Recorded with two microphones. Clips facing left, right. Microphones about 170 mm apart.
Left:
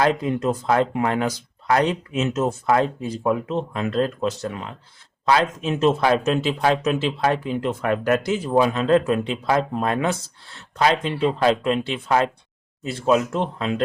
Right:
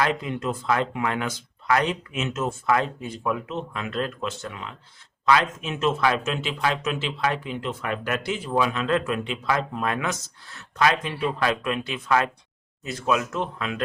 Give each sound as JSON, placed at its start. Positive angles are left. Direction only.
{"t": 0.0, "sound": "speech", "side_deg": 40}